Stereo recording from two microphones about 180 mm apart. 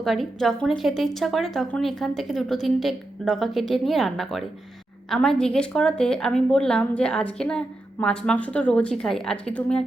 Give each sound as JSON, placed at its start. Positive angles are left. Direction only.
{"t": 0.0, "sound": "a woman's voice", "side_deg": 0}